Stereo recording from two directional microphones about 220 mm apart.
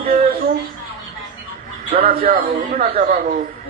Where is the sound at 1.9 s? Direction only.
40° right (ahead or behind).